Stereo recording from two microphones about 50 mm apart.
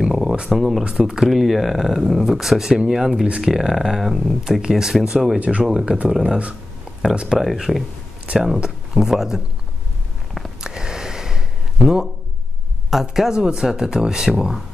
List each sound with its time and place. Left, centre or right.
0.0 s a sound: centre
0.5 s speech: centre
5.4 s speech: right
5.7 s speech: centre
6.2 s speech: right
7.2 s speech: centre
10.6 s a sound: centre
11.8 s speech: centre